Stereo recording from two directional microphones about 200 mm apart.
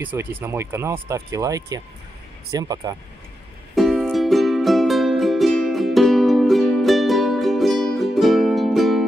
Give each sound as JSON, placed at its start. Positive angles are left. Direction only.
{"t": 0.0, "sound": "speech", "side_deg": -10}
{"t": 3.7, "sound": "music", "side_deg": 0}